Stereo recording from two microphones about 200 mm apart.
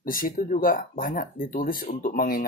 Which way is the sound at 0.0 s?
45° left (ahead or behind).